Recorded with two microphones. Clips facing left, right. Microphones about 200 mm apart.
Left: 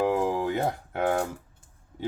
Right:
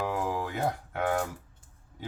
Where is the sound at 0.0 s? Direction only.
25° left (ahead or behind).